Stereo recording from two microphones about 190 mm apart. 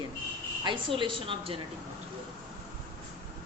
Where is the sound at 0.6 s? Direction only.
25° right (ahead or behind).